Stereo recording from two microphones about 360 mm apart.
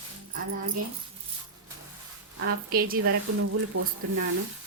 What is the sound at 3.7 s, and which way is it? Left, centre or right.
Speech, right.